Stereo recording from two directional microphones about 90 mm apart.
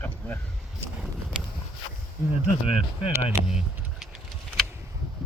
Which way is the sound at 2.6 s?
90° left.